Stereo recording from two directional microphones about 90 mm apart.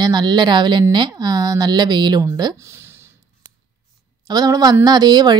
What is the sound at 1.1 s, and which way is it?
Speech, 45° right (ahead or behind).